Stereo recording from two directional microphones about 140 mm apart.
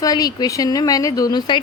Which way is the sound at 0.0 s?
25° left (ahead or behind).